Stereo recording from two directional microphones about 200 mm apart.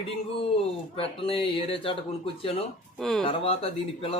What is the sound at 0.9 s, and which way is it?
Speech, 25° left (ahead or behind).